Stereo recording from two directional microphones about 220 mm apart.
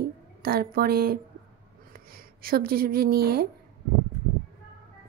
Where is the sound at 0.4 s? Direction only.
45° right (ahead or behind).